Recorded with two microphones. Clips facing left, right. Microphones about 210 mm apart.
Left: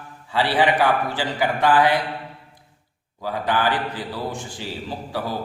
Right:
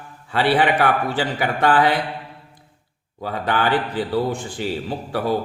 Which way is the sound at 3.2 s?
60° right (ahead or behind).